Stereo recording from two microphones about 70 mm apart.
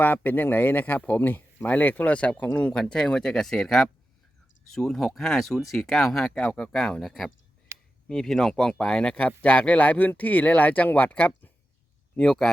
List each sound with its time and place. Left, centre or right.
0.0 s speech: left; by 7.3 s centre
7.7 s a sound: right
8.0 s speech: centre
12.1 s speech: centre